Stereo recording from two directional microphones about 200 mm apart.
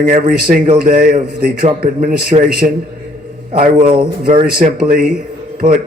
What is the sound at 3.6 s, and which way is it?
Speech, 40° right (ahead or behind).